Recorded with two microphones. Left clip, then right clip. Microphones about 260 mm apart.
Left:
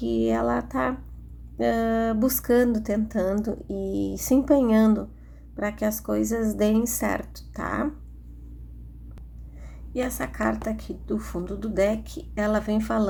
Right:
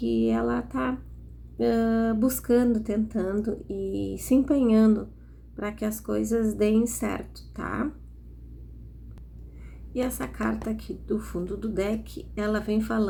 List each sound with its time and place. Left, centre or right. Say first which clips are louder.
0.0 s a woman's voice: left 2 dB; left
9.9 s a woman's voice: left 1 dB; left